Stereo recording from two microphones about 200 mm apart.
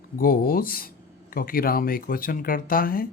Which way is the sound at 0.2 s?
45° left (ahead or behind).